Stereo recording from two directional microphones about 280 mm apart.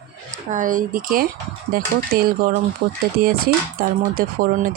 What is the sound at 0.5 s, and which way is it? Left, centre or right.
Speech, right.